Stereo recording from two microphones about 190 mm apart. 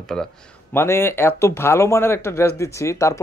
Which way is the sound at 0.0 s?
5° left (ahead or behind).